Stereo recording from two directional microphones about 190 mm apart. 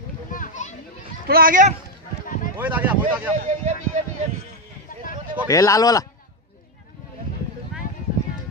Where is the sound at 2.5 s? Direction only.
10° right (ahead or behind).